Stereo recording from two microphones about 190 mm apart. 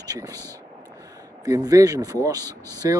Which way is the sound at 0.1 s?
20° right (ahead or behind).